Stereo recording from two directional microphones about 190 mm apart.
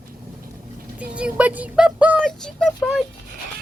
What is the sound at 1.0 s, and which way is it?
Music, 5° right (ahead or behind).